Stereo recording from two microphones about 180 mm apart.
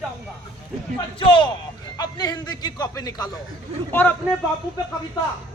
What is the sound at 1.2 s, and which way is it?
Speech, 25° left (ahead or behind).